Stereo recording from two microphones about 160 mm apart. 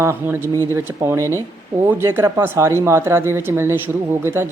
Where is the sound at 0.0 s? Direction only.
15° right (ahead or behind).